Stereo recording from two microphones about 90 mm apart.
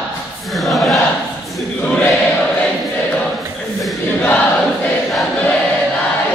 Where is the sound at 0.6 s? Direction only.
Centre (ahead or behind).